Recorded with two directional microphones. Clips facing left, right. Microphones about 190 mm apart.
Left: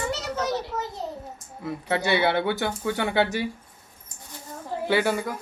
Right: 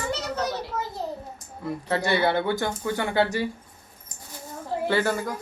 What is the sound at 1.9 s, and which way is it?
Speech, 20° left (ahead or behind).